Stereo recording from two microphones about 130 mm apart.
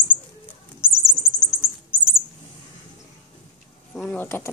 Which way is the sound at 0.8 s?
35° right (ahead or behind).